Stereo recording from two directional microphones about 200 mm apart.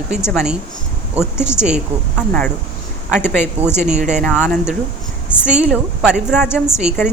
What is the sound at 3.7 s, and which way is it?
Speech, 35° right (ahead or behind).